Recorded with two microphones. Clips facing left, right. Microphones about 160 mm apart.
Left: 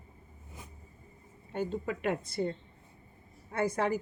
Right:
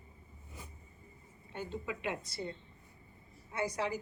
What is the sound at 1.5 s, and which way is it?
A woman's voice, 45° left (ahead or behind).